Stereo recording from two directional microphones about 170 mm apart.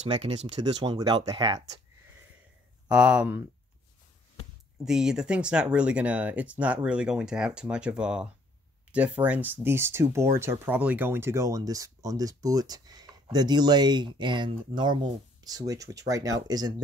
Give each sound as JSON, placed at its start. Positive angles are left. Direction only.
{"t": 0.6, "sound": "speech", "side_deg": -25}
{"t": 2.9, "sound": "speech", "side_deg": -5}
{"t": 4.7, "sound": "speech", "side_deg": -5}